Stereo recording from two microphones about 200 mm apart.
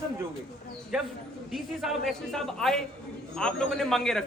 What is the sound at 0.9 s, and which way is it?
A man's voice, 5° right (ahead or behind).